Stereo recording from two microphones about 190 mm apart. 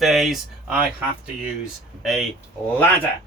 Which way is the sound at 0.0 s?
Centre (ahead or behind).